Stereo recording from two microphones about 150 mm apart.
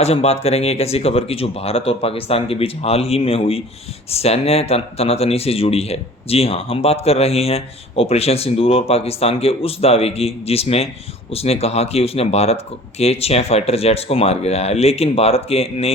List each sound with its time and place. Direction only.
0.0 s speech: 45° left (ahead or behind)